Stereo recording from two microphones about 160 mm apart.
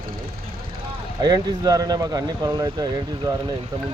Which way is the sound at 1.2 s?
25° right (ahead or behind).